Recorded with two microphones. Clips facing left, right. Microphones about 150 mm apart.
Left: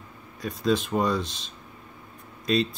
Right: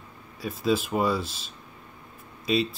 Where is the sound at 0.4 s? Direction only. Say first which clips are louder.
Left 1 dB; 5° right (ahead or behind).